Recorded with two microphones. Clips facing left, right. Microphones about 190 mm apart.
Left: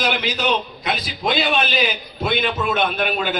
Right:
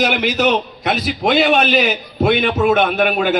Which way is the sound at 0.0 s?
65° right (ahead or behind).